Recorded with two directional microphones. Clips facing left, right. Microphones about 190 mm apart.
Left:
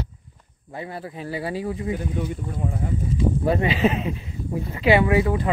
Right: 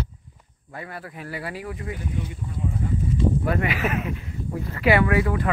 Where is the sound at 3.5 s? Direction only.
25° left (ahead or behind).